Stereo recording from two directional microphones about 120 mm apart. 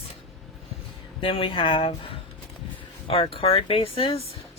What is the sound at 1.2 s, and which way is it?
A woman's voice, 45° left (ahead or behind).